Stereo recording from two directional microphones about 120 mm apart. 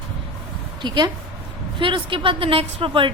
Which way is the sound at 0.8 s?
40° right (ahead or behind).